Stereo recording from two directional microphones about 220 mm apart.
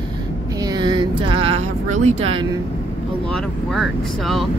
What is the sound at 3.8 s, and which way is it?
Speech, centre (ahead or behind).